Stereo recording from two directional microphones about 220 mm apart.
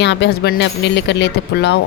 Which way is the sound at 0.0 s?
50° left (ahead or behind).